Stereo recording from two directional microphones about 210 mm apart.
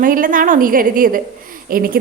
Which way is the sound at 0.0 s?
40° right (ahead or behind).